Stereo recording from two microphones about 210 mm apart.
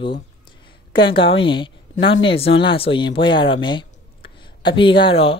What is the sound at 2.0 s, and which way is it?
Speech, 65° left (ahead or behind).